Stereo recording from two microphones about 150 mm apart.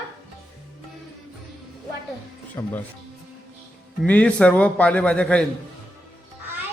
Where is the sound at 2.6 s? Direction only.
20° left (ahead or behind).